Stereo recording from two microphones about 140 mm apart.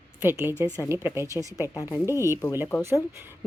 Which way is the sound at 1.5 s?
25° left (ahead or behind).